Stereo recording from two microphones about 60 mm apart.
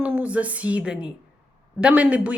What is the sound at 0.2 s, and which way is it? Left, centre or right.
A woman's voice, right.